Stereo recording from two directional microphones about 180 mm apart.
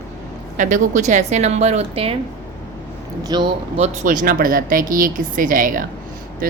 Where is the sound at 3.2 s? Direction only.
25° right (ahead or behind).